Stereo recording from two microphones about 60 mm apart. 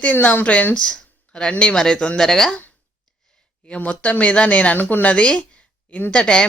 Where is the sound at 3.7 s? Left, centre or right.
Left.